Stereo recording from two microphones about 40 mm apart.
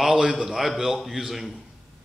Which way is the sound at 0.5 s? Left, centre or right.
Centre.